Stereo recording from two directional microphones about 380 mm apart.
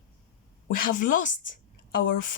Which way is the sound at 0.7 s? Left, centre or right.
Left.